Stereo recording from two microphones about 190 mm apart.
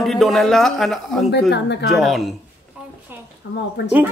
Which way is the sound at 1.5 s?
65° left (ahead or behind).